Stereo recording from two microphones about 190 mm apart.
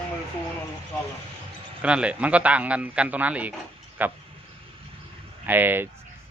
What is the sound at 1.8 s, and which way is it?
Speech, 5° right (ahead or behind).